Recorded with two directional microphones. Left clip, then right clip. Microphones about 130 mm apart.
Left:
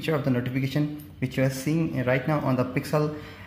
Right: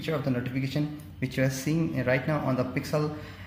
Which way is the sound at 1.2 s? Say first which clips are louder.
Left 2 dB; 30° left (ahead or behind).